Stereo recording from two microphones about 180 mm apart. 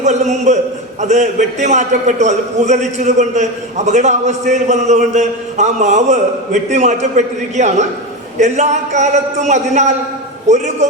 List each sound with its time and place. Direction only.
0.0 s a man's voice: 40° right (ahead or behind)